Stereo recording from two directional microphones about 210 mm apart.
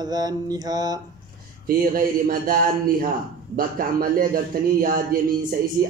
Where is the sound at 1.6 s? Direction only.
45° right (ahead or behind).